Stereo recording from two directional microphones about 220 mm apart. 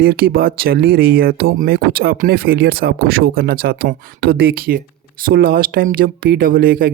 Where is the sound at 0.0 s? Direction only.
45° right (ahead or behind).